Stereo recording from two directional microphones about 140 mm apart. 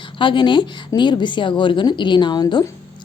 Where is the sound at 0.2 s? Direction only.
35° left (ahead or behind).